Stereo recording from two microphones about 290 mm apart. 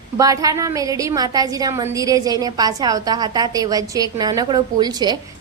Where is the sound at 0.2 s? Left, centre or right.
Centre.